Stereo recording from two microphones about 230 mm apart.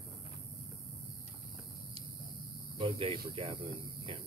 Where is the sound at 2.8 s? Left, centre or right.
Right.